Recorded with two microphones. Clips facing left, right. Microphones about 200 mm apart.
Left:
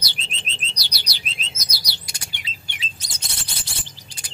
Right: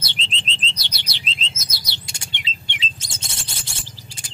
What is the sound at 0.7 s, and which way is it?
Chirp, 25° right (ahead or behind).